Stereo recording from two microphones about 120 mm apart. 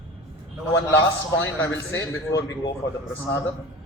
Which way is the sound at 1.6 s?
25° left (ahead or behind).